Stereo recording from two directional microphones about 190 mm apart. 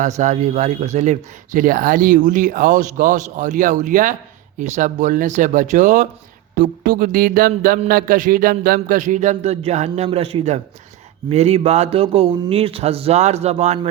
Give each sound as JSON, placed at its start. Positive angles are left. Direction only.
{"t": 0.0, "sound": "speech", "side_deg": -40}